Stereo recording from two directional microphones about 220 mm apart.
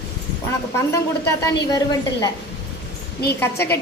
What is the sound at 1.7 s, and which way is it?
Speech, 20° left (ahead or behind).